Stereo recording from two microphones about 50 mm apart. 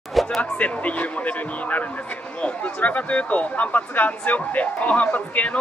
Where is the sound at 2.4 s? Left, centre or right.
Left.